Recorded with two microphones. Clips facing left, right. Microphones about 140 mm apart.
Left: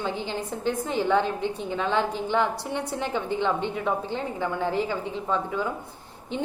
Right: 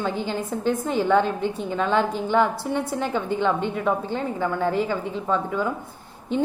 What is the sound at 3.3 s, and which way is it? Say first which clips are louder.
Speech: right 3 dB; 50° right (ahead or behind).